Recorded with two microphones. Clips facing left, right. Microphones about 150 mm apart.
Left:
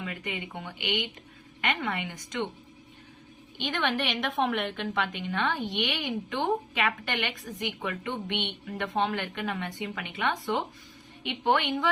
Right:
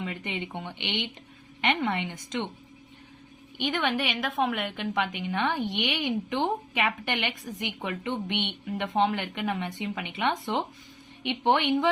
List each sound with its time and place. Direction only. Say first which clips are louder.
0.0 s a woman's voice: right 2 dB; 20° right (ahead or behind)
3.6 s a woman's voice: right 2 dB; 10° right (ahead or behind)
4.8 s a woman's voice: right 2 dB; 15° right (ahead or behind)